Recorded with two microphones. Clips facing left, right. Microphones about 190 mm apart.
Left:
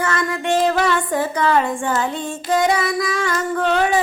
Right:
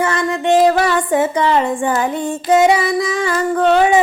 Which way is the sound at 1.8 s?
15° right (ahead or behind).